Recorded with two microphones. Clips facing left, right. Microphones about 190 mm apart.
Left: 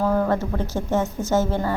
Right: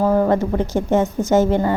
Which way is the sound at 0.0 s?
15° right (ahead or behind).